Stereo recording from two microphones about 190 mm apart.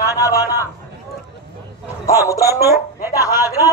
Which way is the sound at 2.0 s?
15° left (ahead or behind).